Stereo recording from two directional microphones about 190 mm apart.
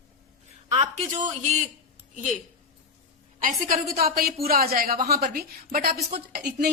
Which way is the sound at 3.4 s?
45° right (ahead or behind).